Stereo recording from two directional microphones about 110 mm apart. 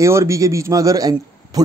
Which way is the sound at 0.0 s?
25° right (ahead or behind).